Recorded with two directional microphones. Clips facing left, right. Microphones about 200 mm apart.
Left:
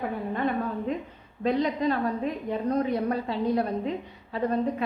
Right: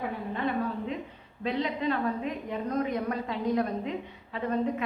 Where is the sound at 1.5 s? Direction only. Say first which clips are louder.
Left 4 dB; 40° left (ahead or behind).